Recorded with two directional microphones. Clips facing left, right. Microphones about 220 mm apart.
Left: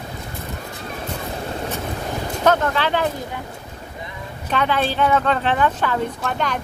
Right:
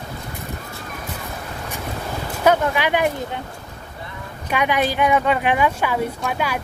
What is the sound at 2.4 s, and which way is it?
Speech, 10° right (ahead or behind).